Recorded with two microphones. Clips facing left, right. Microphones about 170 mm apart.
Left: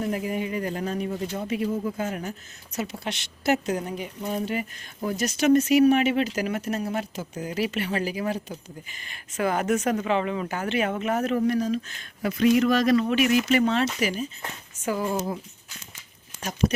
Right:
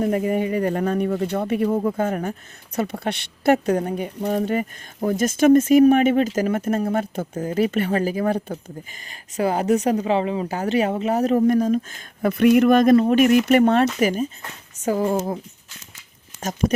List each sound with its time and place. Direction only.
0.0 s speech: 55° right (ahead or behind)
9.0 s speech: 35° right (ahead or behind)
16.4 s speech: 45° right (ahead or behind)